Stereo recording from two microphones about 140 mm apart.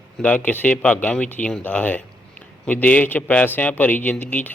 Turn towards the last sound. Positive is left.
turn(degrees=10)  # may be behind; listen again after turning